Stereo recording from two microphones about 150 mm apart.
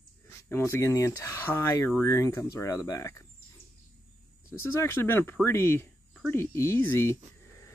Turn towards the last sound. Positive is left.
turn(degrees=15)  # may be behind; listen again after turning